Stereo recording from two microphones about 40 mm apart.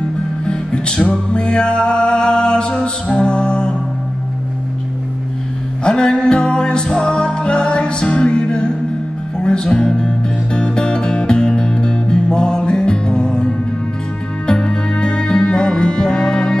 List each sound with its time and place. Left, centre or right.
0.5 s music: left
5.9 s music: centre